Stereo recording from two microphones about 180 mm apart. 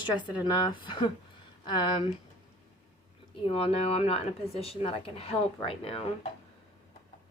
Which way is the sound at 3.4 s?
35° left (ahead or behind).